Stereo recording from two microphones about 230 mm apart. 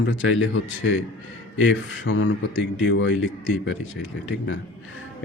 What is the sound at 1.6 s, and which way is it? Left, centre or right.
Speech, left.